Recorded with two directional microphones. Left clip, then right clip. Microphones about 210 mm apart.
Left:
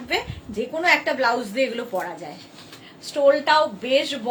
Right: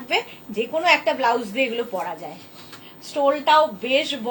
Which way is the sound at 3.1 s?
20° left (ahead or behind).